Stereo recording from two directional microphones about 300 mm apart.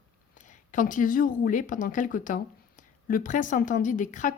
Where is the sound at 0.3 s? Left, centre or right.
Left.